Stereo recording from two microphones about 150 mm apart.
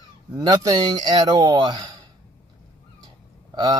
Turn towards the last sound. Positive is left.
turn(degrees=-30)  # may be behind; listen again after turning